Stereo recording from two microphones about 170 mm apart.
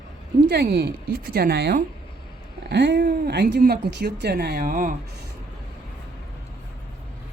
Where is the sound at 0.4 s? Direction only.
70° right (ahead or behind).